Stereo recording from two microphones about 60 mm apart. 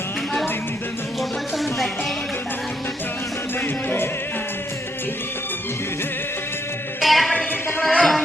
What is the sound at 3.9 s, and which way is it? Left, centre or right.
Music, left.